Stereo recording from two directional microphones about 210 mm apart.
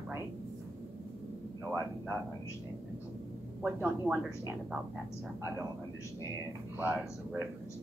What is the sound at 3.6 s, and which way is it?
A woman's voice, 10° right (ahead or behind).